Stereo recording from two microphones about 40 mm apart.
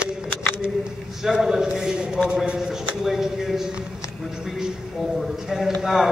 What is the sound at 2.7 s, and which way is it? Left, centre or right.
Speech, centre.